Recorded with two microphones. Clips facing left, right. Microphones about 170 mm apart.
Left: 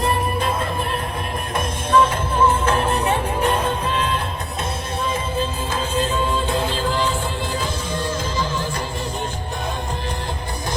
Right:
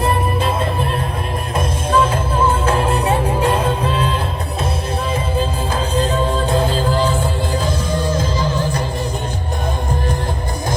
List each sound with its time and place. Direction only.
0.0 s music: 30° right (ahead or behind)
5.7 s music: 35° right (ahead or behind)